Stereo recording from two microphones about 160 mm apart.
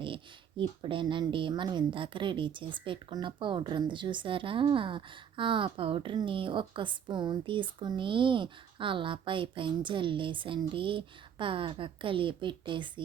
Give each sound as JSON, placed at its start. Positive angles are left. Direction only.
{"t": 0.0, "sound": "a woman's voice", "side_deg": -30}